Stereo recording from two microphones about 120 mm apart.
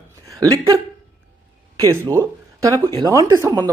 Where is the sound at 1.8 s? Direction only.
25° right (ahead or behind).